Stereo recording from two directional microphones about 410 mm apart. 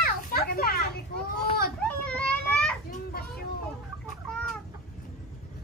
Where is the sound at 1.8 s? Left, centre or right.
Centre.